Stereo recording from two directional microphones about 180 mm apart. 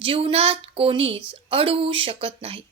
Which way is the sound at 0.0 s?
30° right (ahead or behind).